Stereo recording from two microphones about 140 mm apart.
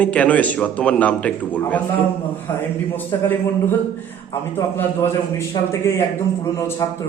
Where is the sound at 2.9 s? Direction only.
15° left (ahead or behind).